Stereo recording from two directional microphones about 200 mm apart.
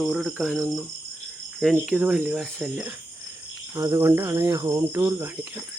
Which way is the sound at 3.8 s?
15° right (ahead or behind).